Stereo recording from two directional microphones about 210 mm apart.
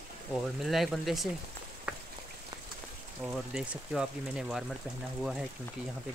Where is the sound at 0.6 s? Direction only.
Centre (ahead or behind).